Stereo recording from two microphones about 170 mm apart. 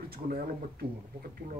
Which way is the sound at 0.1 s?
60° right (ahead or behind).